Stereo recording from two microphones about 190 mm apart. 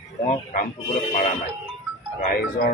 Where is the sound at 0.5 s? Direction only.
40° left (ahead or behind).